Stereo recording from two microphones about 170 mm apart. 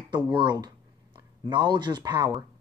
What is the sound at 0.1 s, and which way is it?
Speech, 30° right (ahead or behind).